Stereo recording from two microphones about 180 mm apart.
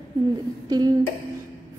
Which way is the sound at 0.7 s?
20° right (ahead or behind).